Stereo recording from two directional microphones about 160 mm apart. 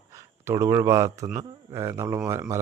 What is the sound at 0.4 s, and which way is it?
Speech, 20° right (ahead or behind).